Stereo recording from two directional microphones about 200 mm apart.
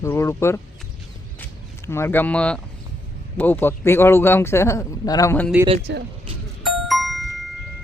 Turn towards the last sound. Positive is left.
turn(degrees=0)  # may be behind; listen again after turning